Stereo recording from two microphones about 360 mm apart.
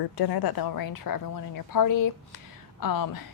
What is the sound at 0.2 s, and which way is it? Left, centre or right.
A woman's voice, left.